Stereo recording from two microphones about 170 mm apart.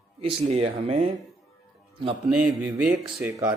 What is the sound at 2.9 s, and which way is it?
Speech, 20° right (ahead or behind).